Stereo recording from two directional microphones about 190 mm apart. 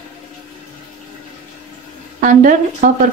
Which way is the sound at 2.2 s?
45° right (ahead or behind).